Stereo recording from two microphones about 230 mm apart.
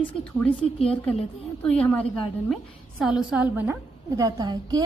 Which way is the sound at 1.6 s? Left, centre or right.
Centre.